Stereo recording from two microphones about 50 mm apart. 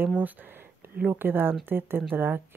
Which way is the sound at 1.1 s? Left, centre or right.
Right.